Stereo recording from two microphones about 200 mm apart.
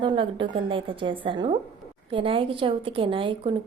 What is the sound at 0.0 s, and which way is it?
A woman's voice, 25° right (ahead or behind).